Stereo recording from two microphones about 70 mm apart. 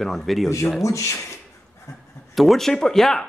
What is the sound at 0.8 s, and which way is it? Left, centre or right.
Speech, left.